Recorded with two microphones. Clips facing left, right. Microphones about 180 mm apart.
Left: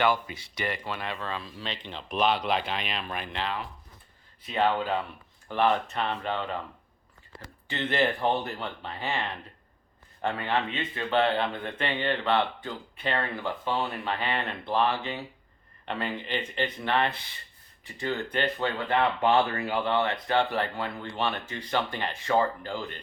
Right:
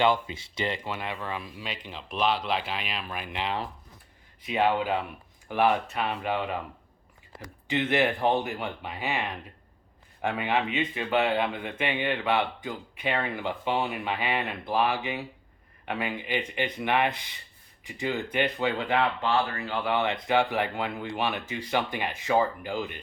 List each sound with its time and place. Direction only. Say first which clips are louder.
0.0 s speech: right 2 dB; 20° right (ahead or behind)
7.7 s speech: right 2 dB; 15° right (ahead or behind)
19.2 s speech: left 3 dB; 20° left (ahead or behind)
19.8 s speech: right 2 dB; 15° right (ahead or behind)